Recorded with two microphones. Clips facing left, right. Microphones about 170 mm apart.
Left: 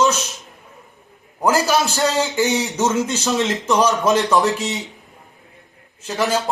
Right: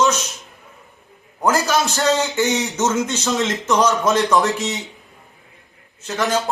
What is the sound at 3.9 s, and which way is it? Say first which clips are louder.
Speech: even; centre (ahead or behind).